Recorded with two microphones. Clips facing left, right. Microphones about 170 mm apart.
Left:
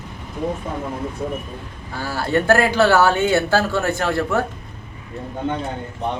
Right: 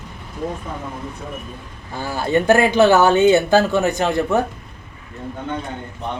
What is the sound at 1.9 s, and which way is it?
Speech, 20° right (ahead or behind).